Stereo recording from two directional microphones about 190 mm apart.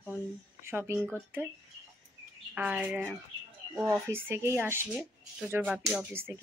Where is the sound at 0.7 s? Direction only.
10° right (ahead or behind).